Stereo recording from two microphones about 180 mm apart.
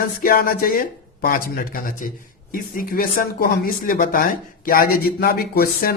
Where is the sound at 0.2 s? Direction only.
55° left (ahead or behind).